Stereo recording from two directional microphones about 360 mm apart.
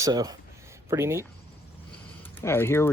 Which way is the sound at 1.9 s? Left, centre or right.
Centre.